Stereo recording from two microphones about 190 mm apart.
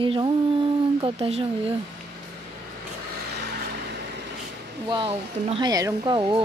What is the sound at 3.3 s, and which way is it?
Vehicle, 60° right (ahead or behind).